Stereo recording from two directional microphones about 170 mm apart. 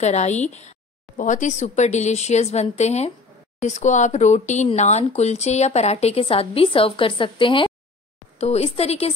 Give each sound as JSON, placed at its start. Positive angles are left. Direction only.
{"t": 0.0, "sound": "speech", "side_deg": 40}